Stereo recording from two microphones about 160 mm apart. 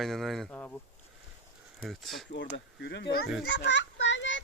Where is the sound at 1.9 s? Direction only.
Centre (ahead or behind).